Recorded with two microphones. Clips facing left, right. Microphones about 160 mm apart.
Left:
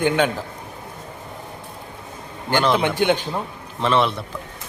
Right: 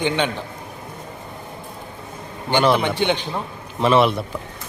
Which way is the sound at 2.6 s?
5° right (ahead or behind).